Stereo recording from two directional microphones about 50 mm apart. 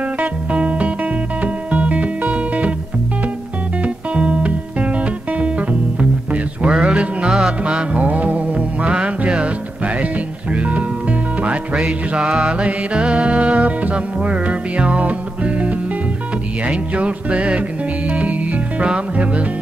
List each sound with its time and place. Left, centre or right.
0.2 s music: right
3.8 s music: right
10.5 s music: right
11.7 s music: centre